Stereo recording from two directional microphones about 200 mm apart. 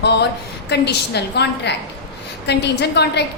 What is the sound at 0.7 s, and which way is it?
A woman's voice, 55° left (ahead or behind).